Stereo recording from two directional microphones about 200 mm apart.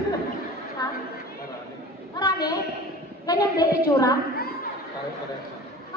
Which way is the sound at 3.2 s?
20° left (ahead or behind).